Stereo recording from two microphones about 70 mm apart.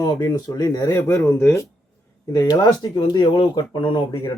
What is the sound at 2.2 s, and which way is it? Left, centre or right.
Speech, left.